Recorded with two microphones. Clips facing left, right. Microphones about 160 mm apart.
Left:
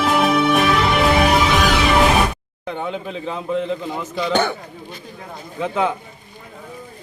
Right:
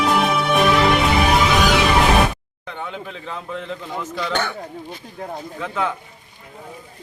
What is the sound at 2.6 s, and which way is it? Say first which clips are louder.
Speech: left 5 dB; 10° left (ahead or behind).